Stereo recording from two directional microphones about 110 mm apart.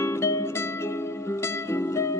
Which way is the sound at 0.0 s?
25° left (ahead or behind).